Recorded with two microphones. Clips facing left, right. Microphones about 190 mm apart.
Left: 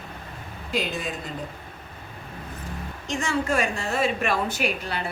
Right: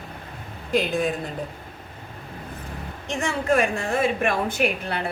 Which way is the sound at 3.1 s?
60° right (ahead or behind).